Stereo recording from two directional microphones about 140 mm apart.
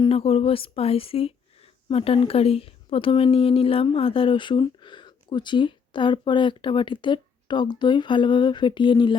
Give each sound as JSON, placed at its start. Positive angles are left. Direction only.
{"t": 0.1, "sound": "speech", "side_deg": 45}